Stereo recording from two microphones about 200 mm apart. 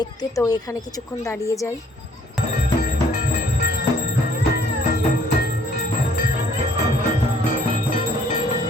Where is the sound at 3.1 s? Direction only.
50° left (ahead or behind).